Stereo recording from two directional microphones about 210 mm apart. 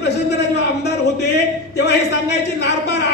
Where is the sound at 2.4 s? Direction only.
55° left (ahead or behind).